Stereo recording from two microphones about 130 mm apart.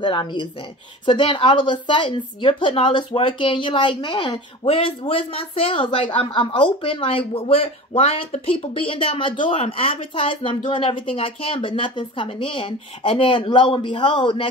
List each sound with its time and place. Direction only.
0.0 s a woman's voice: 40° left (ahead or behind)